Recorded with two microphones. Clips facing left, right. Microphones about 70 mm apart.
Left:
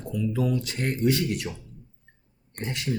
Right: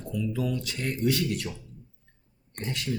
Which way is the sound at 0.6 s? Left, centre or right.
Left.